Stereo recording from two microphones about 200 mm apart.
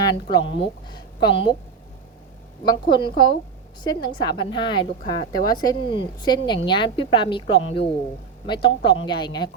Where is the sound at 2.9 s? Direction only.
20° left (ahead or behind).